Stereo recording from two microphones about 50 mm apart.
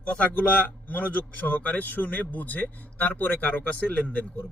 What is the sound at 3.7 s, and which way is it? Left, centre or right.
Speech, left.